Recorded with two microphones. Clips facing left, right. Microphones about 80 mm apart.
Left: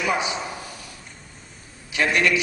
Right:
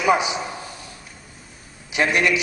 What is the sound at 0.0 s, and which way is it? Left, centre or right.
Speech, centre.